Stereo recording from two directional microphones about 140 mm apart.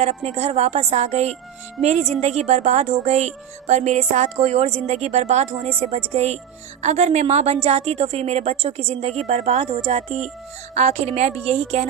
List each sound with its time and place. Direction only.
0.0 s a woman's voice: 50° right (ahead or behind)